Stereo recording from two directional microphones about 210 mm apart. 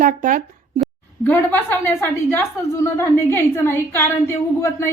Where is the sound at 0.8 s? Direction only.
10° left (ahead or behind).